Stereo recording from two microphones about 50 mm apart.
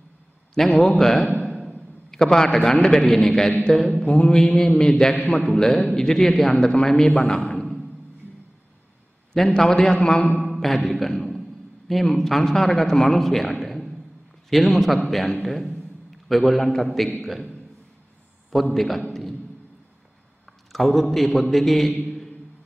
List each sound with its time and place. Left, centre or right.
0.6 s a man's voice: centre
3.9 s a sound: left
4.6 s a man's voice: centre
5.3 s a sound: left
5.6 s a man's voice: centre
6.7 s a man's voice: centre
7.2 s a sound: left
9.6 s a man's voice: centre
10.5 s a man's voice: centre
18.5 s a man's voice: centre
20.7 s a man's voice: centre